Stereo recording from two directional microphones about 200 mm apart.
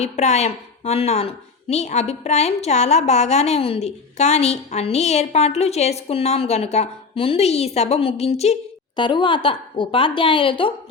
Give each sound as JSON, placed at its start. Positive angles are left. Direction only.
{"t": 0.0, "sound": "a woman's voice", "side_deg": 35}